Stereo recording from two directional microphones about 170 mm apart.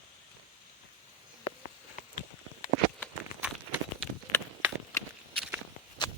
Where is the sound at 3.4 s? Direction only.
5° right (ahead or behind).